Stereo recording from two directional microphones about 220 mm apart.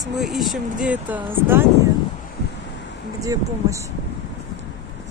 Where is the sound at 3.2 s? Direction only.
15° right (ahead or behind).